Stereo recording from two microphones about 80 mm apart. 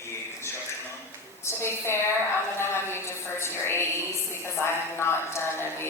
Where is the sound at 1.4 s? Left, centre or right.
Left.